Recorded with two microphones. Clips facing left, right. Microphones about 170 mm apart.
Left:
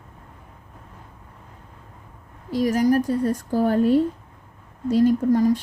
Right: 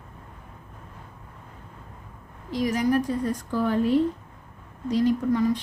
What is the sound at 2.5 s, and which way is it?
A woman's voice, 40° left (ahead or behind).